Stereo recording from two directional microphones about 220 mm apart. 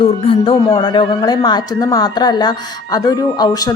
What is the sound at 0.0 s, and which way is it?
A woman's voice, 25° left (ahead or behind).